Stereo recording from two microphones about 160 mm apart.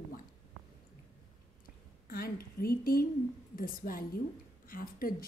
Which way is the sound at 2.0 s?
70° left (ahead or behind).